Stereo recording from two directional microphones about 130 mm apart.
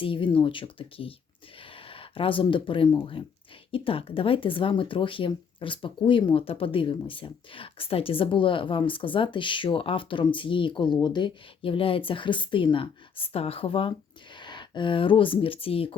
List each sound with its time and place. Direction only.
0.0 s speech: 40° left (ahead or behind)